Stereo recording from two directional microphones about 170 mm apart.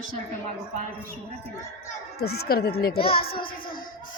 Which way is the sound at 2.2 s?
70° left (ahead or behind).